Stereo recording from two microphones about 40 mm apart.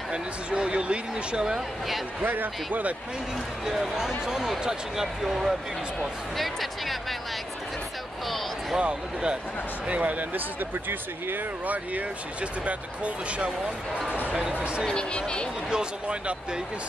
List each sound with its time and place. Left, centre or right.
0.1 s speech: right
2.2 s speech: right
3.6 s speech: centre
6.3 s music: centre
8.7 s speech: right
9.8 s speech: right
11.6 s speech: right
14.5 s speech: right
14.9 s speech: left
15.7 s speech: right